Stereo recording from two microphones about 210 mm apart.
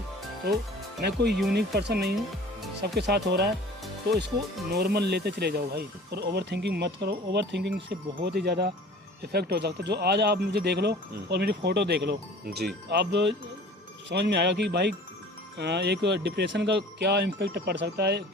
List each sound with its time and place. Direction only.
1.0 s speech: 50° right (ahead or behind)
4.7 s speech: 50° right (ahead or behind)